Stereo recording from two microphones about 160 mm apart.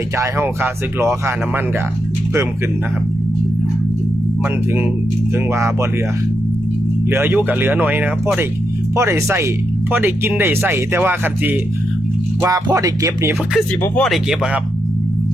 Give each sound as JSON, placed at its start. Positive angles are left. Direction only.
{"t": 0.2, "sound": "speech", "side_deg": -15}
{"t": 5.5, "sound": "speech", "side_deg": -15}
{"t": 7.1, "sound": "speech", "side_deg": -15}
{"t": 12.4, "sound": "music", "side_deg": -20}
{"t": 13.8, "sound": "speech", "side_deg": 10}
{"t": 14.1, "sound": "speech", "side_deg": -5}